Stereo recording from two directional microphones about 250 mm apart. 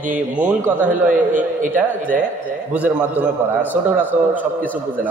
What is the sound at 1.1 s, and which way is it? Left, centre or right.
Speech, right.